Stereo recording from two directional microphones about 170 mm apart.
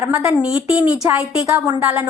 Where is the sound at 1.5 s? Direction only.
20° right (ahead or behind).